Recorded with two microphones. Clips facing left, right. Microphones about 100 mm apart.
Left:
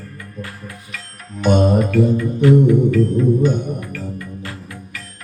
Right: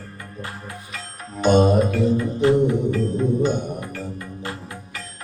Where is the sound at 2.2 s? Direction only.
25° right (ahead or behind).